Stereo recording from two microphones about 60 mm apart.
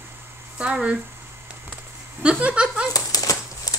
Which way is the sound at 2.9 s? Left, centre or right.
Left.